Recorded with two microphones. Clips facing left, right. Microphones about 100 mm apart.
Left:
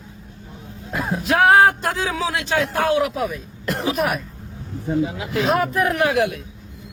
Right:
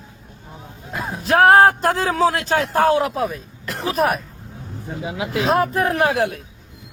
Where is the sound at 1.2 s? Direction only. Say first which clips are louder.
Right 2 dB; 35° right (ahead or behind).